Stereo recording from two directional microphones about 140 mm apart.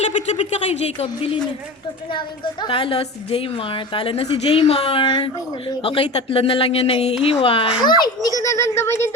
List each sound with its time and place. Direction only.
0.3 s a woman's voice: 45° left (ahead or behind); by 9.0 s 15° left (ahead or behind)